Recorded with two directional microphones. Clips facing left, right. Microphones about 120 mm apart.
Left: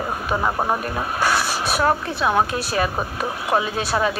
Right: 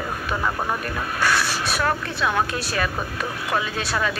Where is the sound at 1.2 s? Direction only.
40° left (ahead or behind).